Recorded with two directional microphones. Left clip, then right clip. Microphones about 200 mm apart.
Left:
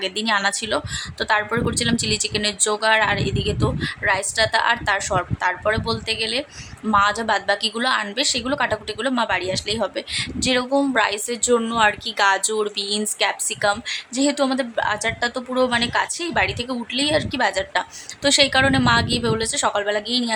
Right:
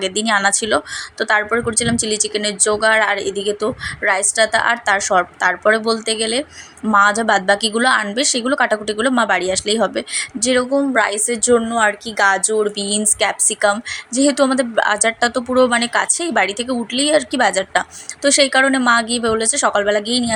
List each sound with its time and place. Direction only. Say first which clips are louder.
0.0 s a woman's voice: right 4 dB; 20° right (ahead or behind)